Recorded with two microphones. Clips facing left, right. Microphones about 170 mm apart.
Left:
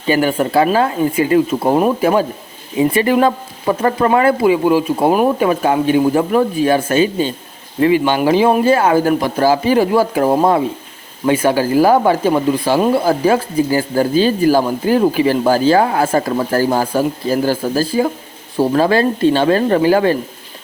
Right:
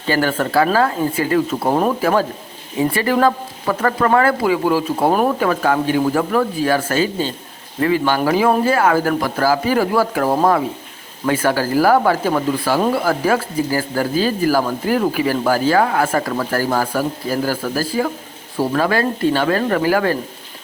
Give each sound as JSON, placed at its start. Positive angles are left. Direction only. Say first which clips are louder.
{"t": 0.1, "sound": "speech", "louder": "left 3 dB", "side_deg": 15}